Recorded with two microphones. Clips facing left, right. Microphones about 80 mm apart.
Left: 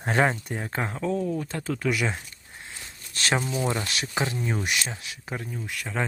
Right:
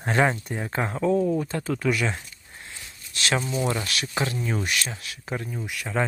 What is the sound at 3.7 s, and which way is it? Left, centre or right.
Speech, left.